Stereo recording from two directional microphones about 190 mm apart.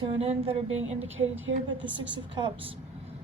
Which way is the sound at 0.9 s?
85° right.